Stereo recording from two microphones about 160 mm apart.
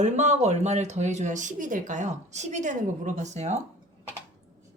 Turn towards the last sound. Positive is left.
turn(degrees=-45)  # may be behind; listen again after turning